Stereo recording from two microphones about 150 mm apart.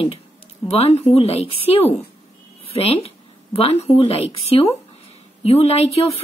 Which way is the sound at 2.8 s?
40° left (ahead or behind).